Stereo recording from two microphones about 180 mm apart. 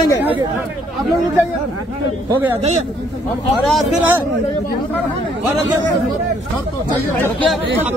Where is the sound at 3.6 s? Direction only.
Centre (ahead or behind).